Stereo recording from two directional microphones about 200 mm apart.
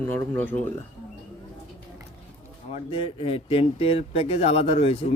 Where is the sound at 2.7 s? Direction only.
30° left (ahead or behind).